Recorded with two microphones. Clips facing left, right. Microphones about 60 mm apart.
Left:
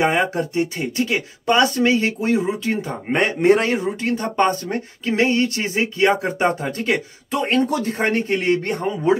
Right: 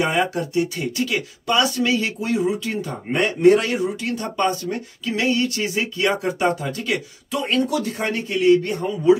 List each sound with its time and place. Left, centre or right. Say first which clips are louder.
0.0 s speech: left 2 dB; left